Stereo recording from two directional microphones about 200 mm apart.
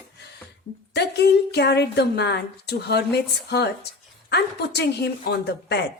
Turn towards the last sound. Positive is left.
turn(degrees=55)  # may be behind; listen again after turning